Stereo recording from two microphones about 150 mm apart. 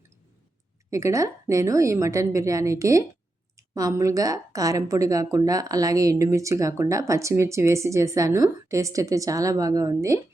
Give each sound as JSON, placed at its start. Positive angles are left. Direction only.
{"t": 0.9, "sound": "a woman's voice", "side_deg": -20}